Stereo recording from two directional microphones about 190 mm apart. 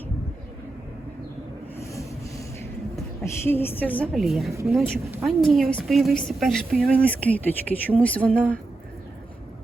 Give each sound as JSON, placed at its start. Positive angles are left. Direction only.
{"t": 1.7, "sound": "vehicle", "side_deg": 15}
{"t": 3.4, "sound": "a woman's voice", "side_deg": 10}